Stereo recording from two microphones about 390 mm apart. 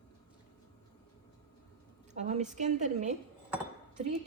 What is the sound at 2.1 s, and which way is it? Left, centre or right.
A woman's voice, centre.